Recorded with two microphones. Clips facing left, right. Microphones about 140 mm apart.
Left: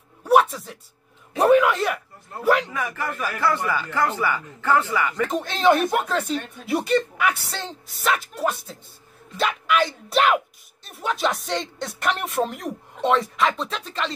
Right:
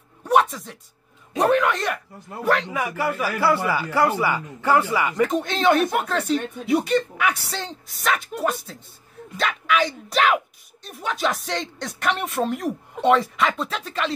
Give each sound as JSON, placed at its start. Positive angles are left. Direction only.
{"t": 0.2, "sound": "a sound", "side_deg": 5}
{"t": 1.4, "sound": "speech", "side_deg": 5}
{"t": 2.7, "sound": "a man's voice", "side_deg": -10}
{"t": 5.3, "sound": "speech", "side_deg": 0}